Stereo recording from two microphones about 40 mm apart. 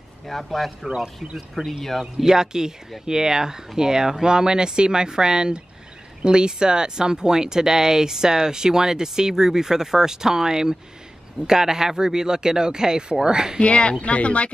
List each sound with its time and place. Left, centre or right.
0.3 s speech: centre
0.8 s speech: centre
1.3 s speech: centre
2.1 s speech: centre
13.6 s speech: left